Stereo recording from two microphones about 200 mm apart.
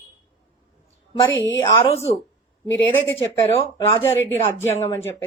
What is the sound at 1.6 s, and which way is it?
Speech, 30° left (ahead or behind).